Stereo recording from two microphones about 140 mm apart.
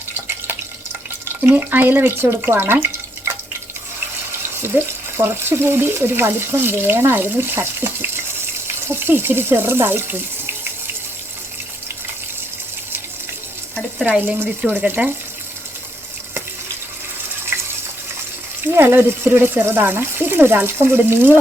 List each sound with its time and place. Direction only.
1.5 s speech: 15° right (ahead or behind)
4.6 s speech: 15° right (ahead or behind)
14.3 s speech: 10° right (ahead or behind)
18.6 s speech: 15° right (ahead or behind)